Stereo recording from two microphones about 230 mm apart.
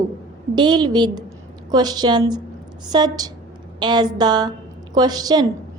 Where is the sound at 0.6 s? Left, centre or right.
Centre.